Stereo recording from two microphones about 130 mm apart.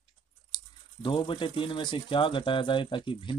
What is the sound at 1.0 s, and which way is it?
Speech, 40° left (ahead or behind).